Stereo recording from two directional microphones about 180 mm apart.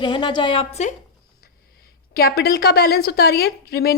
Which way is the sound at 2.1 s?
60° left (ahead or behind).